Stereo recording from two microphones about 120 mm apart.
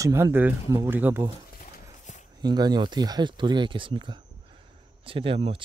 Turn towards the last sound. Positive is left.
turn(degrees=-50)  # may be behind; listen again after turning